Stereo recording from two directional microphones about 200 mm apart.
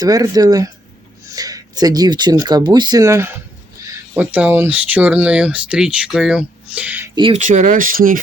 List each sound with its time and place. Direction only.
0.0 s speech: 20° right (ahead or behind)
7.2 s speech: 30° right (ahead or behind)